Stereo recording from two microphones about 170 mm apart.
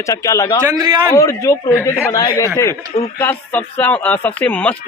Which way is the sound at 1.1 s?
20° left (ahead or behind).